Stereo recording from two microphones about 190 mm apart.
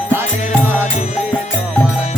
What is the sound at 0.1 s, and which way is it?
Music, 10° right (ahead or behind).